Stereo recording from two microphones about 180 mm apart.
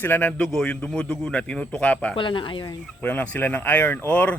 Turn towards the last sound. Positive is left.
turn(degrees=10)  # may be behind; listen again after turning